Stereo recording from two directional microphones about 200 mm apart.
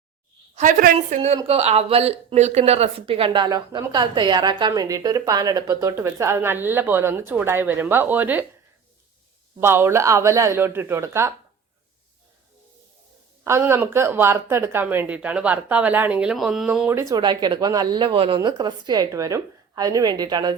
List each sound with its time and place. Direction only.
0.5 s a woman's voice: 40° right (ahead or behind); by 8.4 s 10° right (ahead or behind)
9.6 s speech: 10° right (ahead or behind)
13.4 s speech: 15° right (ahead or behind)